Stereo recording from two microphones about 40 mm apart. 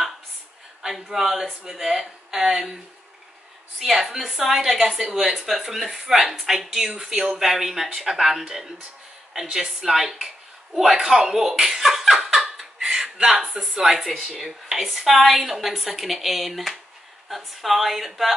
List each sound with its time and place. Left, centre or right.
0.8 s a woman's voice: centre
3.8 s a woman's voice: centre
12.5 s a sound: centre
13.2 s speech: right
13.7 s a woman's voice: centre